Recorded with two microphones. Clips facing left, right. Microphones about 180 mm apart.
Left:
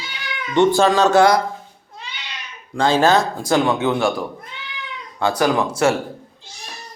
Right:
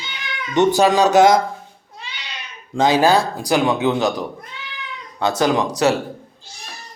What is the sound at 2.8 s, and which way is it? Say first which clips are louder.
Speech: right 1 dB; 15° right (ahead or behind).